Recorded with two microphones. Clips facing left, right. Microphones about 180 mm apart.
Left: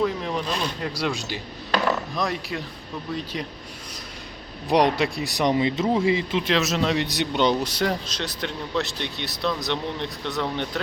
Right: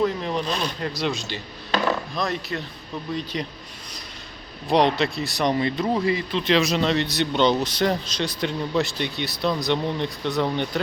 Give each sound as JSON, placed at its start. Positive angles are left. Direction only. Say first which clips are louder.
{"t": 0.0, "sound": "speech", "louder": "right 1 dB", "side_deg": 0}
{"t": 1.1, "sound": "speech", "louder": "even", "side_deg": 15}
{"t": 4.7, "sound": "speech", "louder": "even", "side_deg": 10}
{"t": 6.1, "sound": "speech", "louder": "left 1 dB", "side_deg": 20}
{"t": 6.4, "sound": "speech", "louder": "right 2 dB", "side_deg": 0}